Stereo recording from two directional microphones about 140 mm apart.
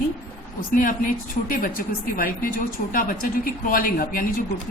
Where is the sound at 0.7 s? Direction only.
75° left (ahead or behind).